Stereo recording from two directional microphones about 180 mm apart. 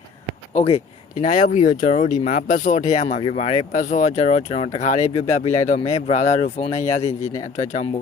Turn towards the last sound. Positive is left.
turn(degrees=35)  # may be behind; listen again after turning